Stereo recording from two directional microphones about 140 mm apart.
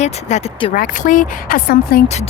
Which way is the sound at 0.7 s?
70° left (ahead or behind).